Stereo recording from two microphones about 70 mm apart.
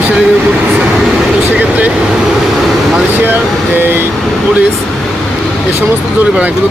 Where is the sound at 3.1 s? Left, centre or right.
Right.